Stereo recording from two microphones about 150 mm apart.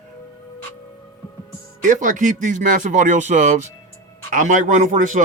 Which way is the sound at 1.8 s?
55° right (ahead or behind).